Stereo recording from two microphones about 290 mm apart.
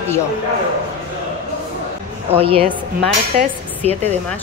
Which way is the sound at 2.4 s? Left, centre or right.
Centre.